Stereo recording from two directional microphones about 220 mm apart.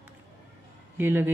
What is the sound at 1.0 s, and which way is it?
Speech, 10° right (ahead or behind).